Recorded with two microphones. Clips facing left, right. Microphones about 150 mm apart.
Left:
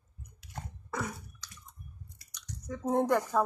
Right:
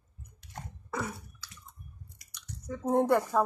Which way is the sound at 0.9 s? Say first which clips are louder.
Right 1 dB; 5° right (ahead or behind).